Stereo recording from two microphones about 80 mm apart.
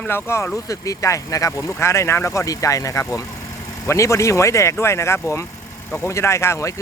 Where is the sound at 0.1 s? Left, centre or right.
Left.